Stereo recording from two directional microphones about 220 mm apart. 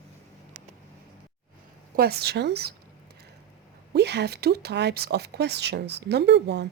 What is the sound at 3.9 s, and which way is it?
Speech, 50° right (ahead or behind).